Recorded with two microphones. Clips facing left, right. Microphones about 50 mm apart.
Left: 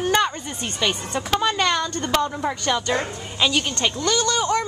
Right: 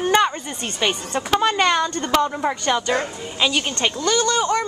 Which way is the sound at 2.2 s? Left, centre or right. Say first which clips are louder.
Right 2 dB; centre.